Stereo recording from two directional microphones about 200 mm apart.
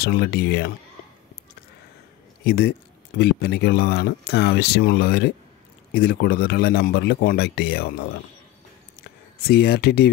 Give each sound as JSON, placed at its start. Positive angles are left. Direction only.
{"t": 0.0, "sound": "a man's voice", "side_deg": 55}
{"t": 2.4, "sound": "a man's voice", "side_deg": 55}
{"t": 9.5, "sound": "a man's voice", "side_deg": 55}